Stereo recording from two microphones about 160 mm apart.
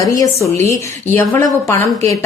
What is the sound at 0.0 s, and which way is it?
A woman's voice, 20° left (ahead or behind).